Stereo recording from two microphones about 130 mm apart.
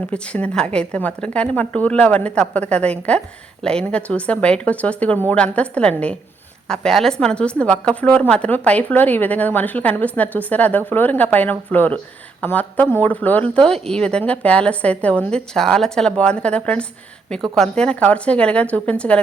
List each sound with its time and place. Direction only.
0.1 s a woman's voice: 10° left (ahead or behind)